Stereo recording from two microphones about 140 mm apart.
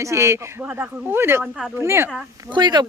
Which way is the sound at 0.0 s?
20° right (ahead or behind).